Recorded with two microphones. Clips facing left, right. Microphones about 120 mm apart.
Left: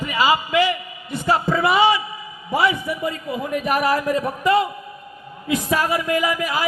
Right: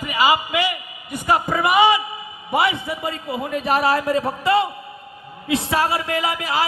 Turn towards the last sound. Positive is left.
turn(degrees=-30)  # may be behind; listen again after turning